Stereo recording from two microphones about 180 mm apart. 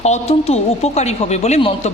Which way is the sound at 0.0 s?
35° left (ahead or behind).